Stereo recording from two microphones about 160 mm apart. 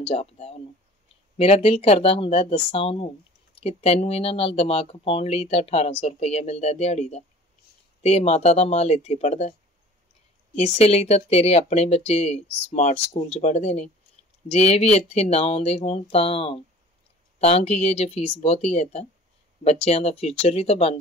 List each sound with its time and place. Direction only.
0.0 s speech: 40° left (ahead or behind)
10.5 s speech: 40° left (ahead or behind)